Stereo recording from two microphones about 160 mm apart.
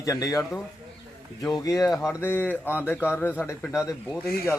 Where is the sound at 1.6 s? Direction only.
20° left (ahead or behind).